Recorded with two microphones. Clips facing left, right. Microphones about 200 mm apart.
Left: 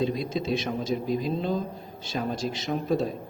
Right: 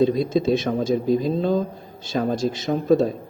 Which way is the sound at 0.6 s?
45° right (ahead or behind).